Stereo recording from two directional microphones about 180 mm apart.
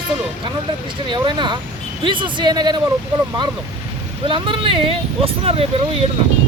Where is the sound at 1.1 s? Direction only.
25° right (ahead or behind).